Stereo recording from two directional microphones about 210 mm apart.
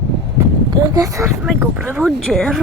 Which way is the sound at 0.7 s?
15° right (ahead or behind).